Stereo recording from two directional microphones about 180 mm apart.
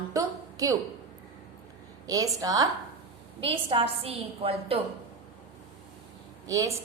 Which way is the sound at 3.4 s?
30° right (ahead or behind).